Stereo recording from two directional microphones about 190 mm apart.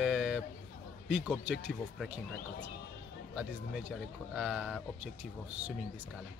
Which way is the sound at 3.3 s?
Centre (ahead or behind).